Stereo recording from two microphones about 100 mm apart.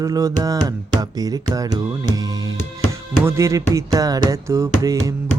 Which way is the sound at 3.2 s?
30° right (ahead or behind).